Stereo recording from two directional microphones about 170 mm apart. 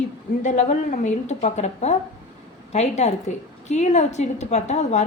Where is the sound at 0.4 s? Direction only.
45° left (ahead or behind).